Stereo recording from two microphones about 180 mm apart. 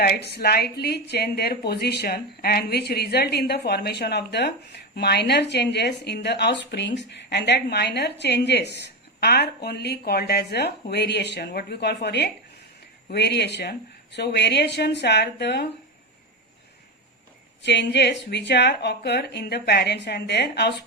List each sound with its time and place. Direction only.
0.0 s a woman's voice: 65° left (ahead or behind)
17.7 s a woman's voice: 75° left (ahead or behind)